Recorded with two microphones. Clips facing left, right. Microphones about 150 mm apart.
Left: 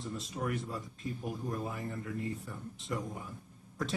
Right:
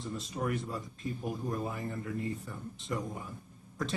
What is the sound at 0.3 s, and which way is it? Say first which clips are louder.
Speech: right 2 dB; 35° right (ahead or behind).